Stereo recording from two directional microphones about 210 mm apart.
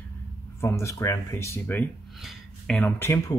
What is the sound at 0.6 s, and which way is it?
Speech, 10° left (ahead or behind).